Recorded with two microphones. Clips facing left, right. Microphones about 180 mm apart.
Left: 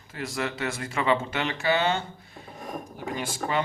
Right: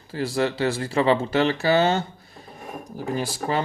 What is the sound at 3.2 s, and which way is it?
Speech, 35° right (ahead or behind).